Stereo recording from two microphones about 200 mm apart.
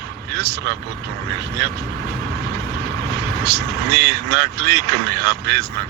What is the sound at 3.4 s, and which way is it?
Speech, 55° right (ahead or behind).